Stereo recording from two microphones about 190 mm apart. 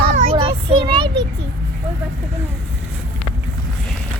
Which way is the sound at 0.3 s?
30° right (ahead or behind).